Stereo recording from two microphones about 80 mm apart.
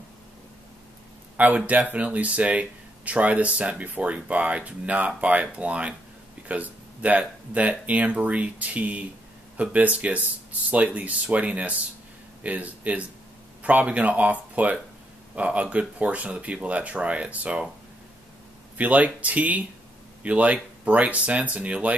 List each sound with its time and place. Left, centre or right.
1.3 s speech: centre
18.8 s speech: centre